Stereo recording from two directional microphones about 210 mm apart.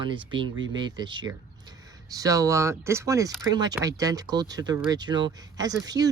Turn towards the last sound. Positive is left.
turn(degrees=-20)  # may be behind; listen again after turning